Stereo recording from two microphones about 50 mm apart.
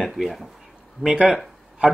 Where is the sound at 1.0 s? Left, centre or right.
Centre.